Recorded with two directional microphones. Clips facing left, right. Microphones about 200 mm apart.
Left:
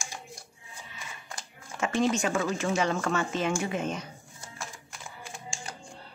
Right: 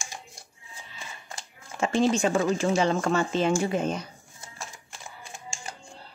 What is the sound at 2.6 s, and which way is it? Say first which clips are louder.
Speech: right 4 dB; 30° right (ahead or behind).